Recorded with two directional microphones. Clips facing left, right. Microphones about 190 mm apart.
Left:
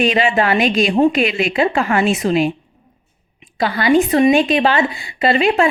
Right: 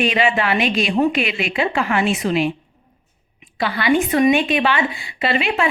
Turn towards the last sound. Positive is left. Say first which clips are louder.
# left 6 dB
turn(degrees=40)  # may be behind; listen again after turning